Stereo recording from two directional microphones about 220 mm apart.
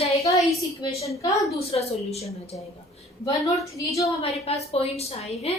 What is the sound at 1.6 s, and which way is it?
Speech, 25° left (ahead or behind).